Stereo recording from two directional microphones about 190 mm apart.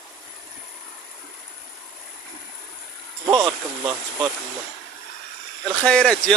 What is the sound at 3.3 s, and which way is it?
Speech, 20° right (ahead or behind).